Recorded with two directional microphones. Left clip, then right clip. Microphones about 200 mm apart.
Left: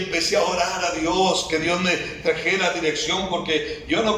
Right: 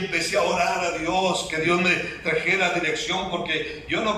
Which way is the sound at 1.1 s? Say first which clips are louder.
Left 3 dB; 25° left (ahead or behind).